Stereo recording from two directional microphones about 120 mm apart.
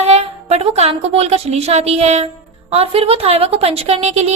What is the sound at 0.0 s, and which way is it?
A woman's voice, 60° right (ahead or behind).